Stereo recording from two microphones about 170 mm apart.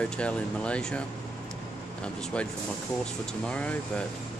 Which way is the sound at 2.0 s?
5° left (ahead or behind).